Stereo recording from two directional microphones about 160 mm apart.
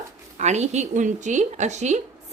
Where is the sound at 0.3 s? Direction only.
45° right (ahead or behind).